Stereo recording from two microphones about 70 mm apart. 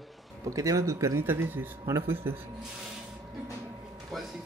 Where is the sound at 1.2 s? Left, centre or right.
Right.